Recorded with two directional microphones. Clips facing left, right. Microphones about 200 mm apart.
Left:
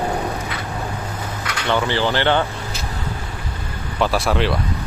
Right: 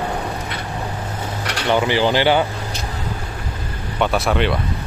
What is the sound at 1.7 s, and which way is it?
Speech, 15° right (ahead or behind).